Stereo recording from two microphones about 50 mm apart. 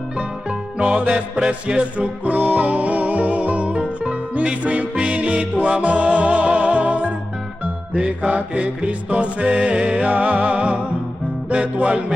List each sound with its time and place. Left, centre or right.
0.5 s music: right
10.0 s music: right